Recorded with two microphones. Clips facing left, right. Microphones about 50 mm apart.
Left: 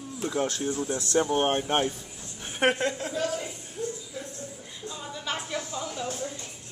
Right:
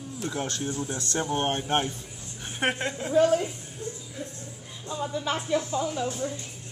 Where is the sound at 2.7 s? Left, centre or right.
Right.